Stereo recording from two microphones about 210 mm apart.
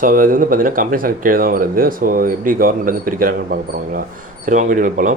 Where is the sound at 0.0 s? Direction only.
40° right (ahead or behind).